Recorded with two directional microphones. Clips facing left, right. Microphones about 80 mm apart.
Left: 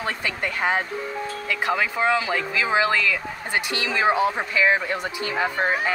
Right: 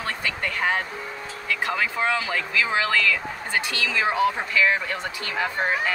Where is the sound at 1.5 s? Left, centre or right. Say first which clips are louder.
Left 1 dB; centre.